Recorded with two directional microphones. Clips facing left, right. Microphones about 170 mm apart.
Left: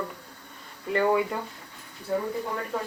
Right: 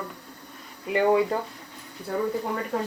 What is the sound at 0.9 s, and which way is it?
Speech, 15° right (ahead or behind).